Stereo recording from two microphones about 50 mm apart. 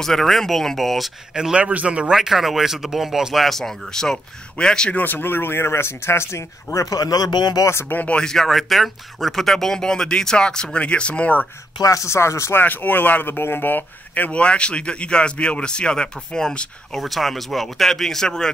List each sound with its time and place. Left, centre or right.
0.0 s speech: centre
1.3 s speech: centre
1.6 s speech: right
2.1 s speech: centre
3.4 s speech: centre
4.9 s speech: left
8.1 s speech: centre
8.5 s speech: centre; by 11.4 s left
11.9 s speech: left
12.5 s speech: left
13.4 s speech: left; by 17.0 s centre
17.0 s speech: centre